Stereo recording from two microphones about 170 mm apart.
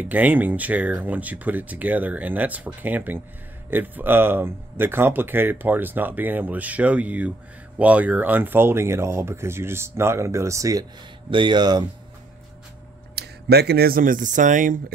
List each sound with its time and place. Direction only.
0.0 s speech: 10° right (ahead or behind); by 11.8 s 25° right (ahead or behind)
13.1 s speech: 75° right (ahead or behind); by 14.8 s 50° right (ahead or behind)